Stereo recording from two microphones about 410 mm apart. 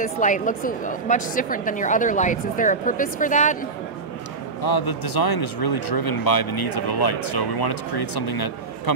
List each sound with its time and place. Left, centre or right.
0.0 s a woman's voice: centre
4.6 s speech: left